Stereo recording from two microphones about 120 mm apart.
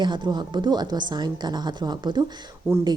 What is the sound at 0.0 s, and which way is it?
Speech, 40° right (ahead or behind).